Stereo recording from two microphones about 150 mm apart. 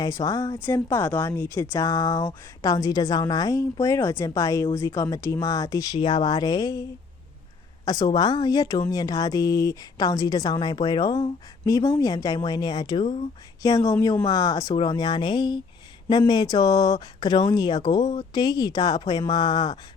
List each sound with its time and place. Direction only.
0.0 s speech: 25° left (ahead or behind)
7.9 s speech: 25° left (ahead or behind)